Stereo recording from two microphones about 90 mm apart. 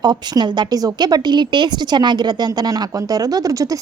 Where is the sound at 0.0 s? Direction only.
50° right (ahead or behind).